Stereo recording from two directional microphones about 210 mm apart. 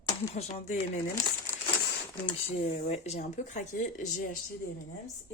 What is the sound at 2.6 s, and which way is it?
Speech, 30° left (ahead or behind).